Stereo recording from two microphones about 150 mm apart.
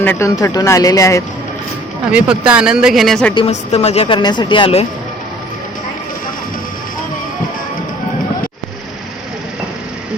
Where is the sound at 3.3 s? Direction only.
45° left (ahead or behind).